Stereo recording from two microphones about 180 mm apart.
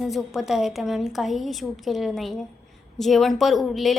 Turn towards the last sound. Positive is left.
turn(degrees=0)  # may be behind; listen again after turning